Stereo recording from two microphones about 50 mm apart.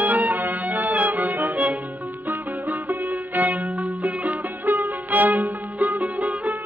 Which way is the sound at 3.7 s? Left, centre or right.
Right.